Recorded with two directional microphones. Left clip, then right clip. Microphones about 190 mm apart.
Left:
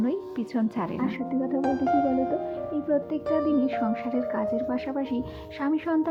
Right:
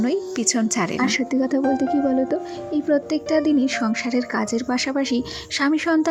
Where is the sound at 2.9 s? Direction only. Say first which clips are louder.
Right 5 dB; 30° right (ahead or behind).